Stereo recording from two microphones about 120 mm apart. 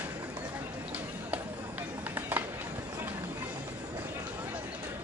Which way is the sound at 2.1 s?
15° right (ahead or behind).